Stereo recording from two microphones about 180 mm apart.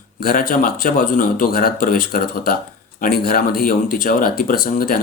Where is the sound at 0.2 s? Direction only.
55° left (ahead or behind).